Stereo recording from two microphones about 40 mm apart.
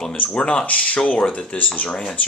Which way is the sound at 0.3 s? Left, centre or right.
Centre.